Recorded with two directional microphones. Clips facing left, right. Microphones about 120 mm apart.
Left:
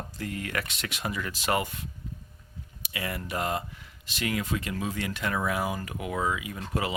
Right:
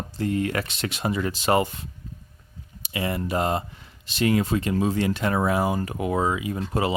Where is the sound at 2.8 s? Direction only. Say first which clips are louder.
Right 7 dB; 25° right (ahead or behind).